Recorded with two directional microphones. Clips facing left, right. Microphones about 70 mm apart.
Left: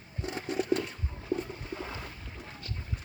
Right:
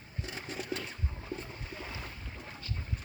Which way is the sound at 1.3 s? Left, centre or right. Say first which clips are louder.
Left 11 dB; centre.